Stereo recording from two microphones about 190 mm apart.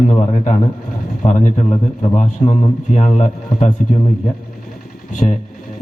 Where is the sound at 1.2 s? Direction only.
40° left (ahead or behind).